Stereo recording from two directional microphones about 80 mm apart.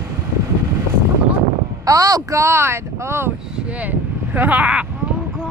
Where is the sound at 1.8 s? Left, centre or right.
Right.